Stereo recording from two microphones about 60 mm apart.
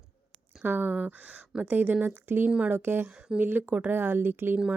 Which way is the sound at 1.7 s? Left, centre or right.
Right.